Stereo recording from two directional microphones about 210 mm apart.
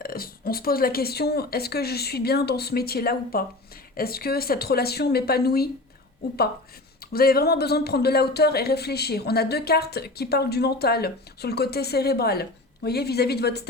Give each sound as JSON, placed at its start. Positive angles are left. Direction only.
{"t": 0.0, "sound": "speech", "side_deg": 45}
{"t": 7.0, "sound": "speech", "side_deg": 45}